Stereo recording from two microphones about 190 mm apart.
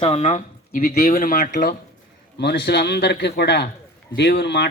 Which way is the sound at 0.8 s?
50° left (ahead or behind).